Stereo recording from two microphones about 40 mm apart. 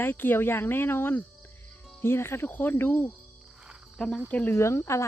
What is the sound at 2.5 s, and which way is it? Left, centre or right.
Speech, left.